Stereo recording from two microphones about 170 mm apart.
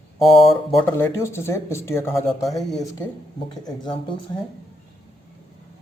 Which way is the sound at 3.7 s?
30° left (ahead or behind).